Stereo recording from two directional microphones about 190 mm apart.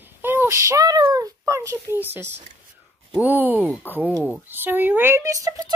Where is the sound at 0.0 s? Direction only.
10° right (ahead or behind).